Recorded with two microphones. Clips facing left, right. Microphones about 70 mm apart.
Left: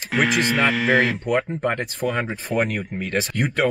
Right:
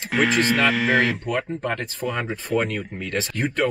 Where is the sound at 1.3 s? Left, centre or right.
Centre.